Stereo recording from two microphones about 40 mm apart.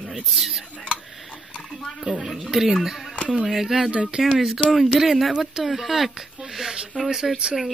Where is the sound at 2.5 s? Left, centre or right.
Centre.